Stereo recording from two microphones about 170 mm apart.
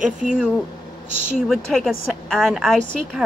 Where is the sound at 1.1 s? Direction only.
45° right (ahead or behind).